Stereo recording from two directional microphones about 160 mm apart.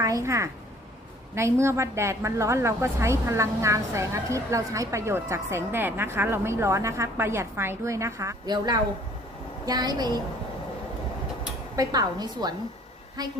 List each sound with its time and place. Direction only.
0.0 s a woman's voice: 20° right (ahead or behind)
11.8 s a woman's voice: 25° right (ahead or behind)